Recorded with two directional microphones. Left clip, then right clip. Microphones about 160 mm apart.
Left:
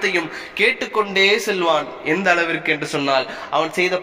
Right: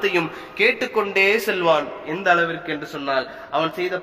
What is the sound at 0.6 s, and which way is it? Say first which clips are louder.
A man's voice: left 1 dB; 15° left (ahead or behind).